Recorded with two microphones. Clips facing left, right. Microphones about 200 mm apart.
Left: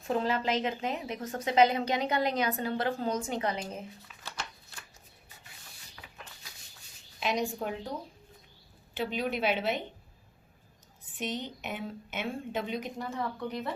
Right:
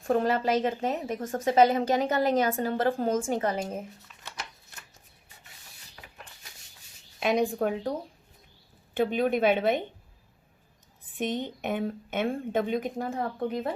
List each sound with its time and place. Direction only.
0.1 s a woman's voice: 50° right (ahead or behind)
7.2 s a woman's voice: 55° right (ahead or behind)
9.0 s a woman's voice: 50° right (ahead or behind)
11.2 s a woman's voice: 50° right (ahead or behind)